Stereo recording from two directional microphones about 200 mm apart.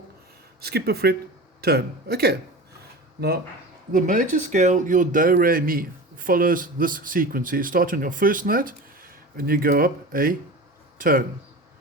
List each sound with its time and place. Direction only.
0.6 s speech: 55° right (ahead or behind)
3.9 s speech: 40° right (ahead or behind)